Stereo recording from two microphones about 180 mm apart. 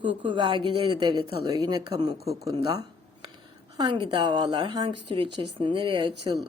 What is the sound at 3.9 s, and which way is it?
Speech, 30° right (ahead or behind).